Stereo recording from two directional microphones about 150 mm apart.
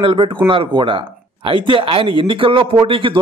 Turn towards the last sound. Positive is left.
turn(degrees=-35)  # may be behind; listen again after turning